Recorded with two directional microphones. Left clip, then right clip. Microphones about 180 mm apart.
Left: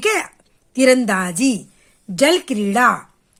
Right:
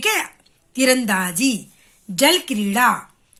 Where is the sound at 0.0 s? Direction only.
60° left (ahead or behind).